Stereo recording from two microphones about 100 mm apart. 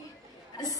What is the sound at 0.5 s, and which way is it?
Speech, 40° left (ahead or behind).